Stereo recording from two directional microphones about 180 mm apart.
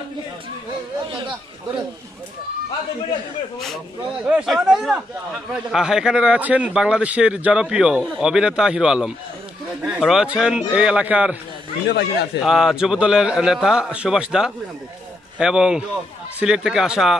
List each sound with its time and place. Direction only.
3.5 s speech: centre (ahead or behind)
11.9 s speech: 65° left (ahead or behind)
12.4 s speech: centre (ahead or behind)